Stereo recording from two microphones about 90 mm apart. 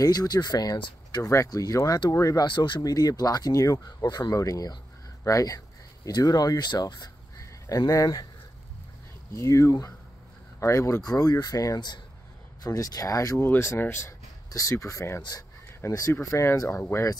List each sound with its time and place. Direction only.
0.0 s speech: 45° left (ahead or behind)
0.7 s speech: 65° left (ahead or behind)
1.2 s speech: 35° left (ahead or behind)
2.4 s speech: 65° left (ahead or behind)
2.8 s speech: 45° left (ahead or behind)
9.3 s speech: 35° left (ahead or behind)
13.5 s speech: 30° left (ahead or behind)